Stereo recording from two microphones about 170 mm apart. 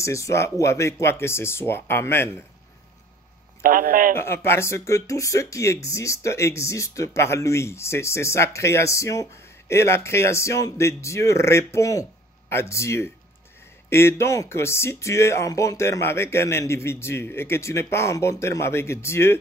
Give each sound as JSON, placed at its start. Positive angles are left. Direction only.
{"t": 0.0, "sound": "speech", "side_deg": 15}
{"t": 3.6, "sound": "speech", "side_deg": -55}
{"t": 4.2, "sound": "speech", "side_deg": 15}